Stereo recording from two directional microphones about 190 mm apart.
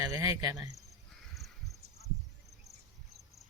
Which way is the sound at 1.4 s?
Centre (ahead or behind).